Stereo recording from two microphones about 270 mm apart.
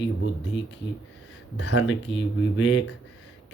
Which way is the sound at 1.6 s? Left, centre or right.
Left.